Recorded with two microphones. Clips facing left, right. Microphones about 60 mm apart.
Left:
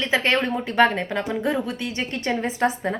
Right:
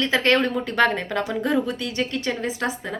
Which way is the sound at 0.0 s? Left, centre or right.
Centre.